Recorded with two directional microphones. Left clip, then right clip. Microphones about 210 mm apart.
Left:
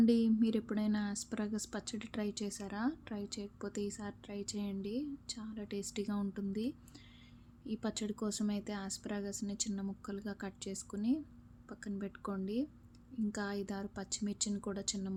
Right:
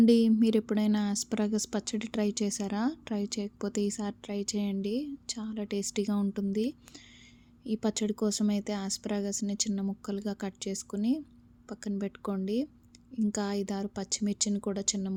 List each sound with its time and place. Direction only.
0.0 s a woman's voice: 35° right (ahead or behind)